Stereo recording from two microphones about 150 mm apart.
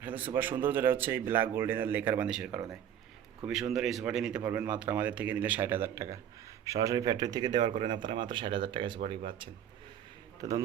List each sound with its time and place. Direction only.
0.0 s speech: 10° right (ahead or behind); by 9.5 s 35° right (ahead or behind)